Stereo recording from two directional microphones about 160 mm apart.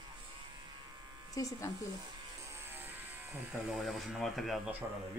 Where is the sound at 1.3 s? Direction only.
20° left (ahead or behind).